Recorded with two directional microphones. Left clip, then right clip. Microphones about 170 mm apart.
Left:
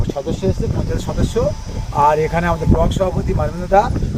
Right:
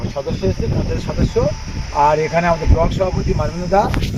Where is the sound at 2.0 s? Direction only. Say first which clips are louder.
Even; 25° left (ahead or behind).